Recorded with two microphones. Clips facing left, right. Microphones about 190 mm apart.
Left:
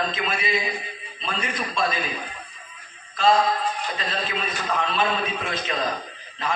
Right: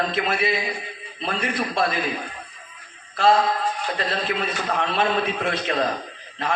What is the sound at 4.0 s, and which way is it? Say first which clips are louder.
Speech: right 7 dB; 65° right (ahead or behind).